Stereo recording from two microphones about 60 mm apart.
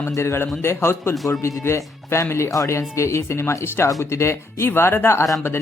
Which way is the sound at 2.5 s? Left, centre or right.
Left.